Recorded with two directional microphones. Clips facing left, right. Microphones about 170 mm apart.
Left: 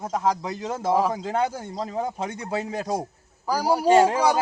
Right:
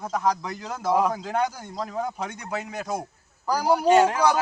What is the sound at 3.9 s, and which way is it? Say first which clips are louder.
Speech: left 2 dB; 30° left (ahead or behind).